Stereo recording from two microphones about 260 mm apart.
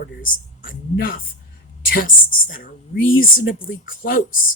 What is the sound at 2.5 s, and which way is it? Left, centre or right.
Speech, left.